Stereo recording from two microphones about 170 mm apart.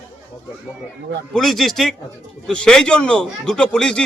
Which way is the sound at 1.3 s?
Centre (ahead or behind).